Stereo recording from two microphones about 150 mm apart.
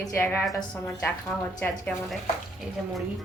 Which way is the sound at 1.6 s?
15° left (ahead or behind).